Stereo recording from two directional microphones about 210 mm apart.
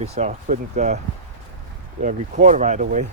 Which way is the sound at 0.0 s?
30° right (ahead or behind).